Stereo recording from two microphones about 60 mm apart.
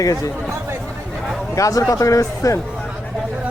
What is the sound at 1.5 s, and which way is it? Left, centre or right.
Speech, left.